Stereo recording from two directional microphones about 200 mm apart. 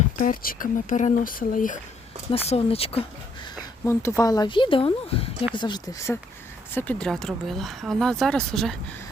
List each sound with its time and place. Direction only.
0.2 s speech: 45° left (ahead or behind)
2.5 s speech: 30° left (ahead or behind)
3.8 s speech: 15° left (ahead or behind)
6.7 s speech: 5° left (ahead or behind)